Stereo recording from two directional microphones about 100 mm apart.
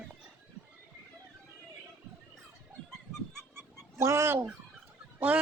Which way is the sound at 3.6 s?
25° right (ahead or behind).